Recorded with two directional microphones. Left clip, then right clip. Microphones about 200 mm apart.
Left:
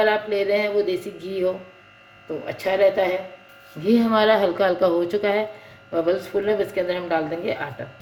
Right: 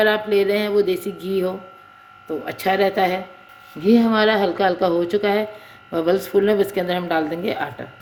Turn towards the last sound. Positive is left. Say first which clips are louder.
# right 2 dB
turn(degrees=-30)  # may be behind; listen again after turning